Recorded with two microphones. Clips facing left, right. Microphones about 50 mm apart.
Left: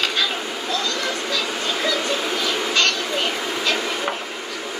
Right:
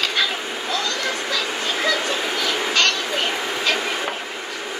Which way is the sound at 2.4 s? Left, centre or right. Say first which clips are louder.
Right 2 dB; right.